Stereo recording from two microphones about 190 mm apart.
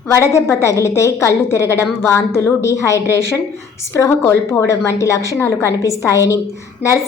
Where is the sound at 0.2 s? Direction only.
15° left (ahead or behind).